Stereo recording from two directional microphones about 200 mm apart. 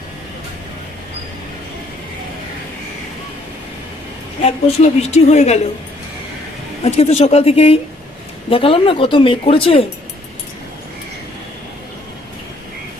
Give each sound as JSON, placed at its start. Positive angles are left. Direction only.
{"t": 4.4, "sound": "a woman's voice", "side_deg": 30}
{"t": 6.8, "sound": "a woman's voice", "side_deg": 30}